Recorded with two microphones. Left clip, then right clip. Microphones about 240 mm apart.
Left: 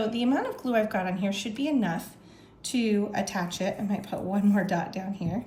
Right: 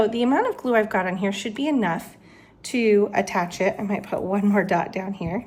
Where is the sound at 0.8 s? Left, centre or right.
Centre.